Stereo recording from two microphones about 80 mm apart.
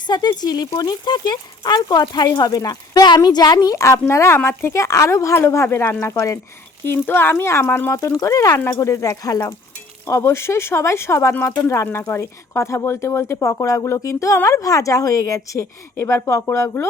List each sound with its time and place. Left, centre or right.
0.1 s speech: left
10.1 s speech: left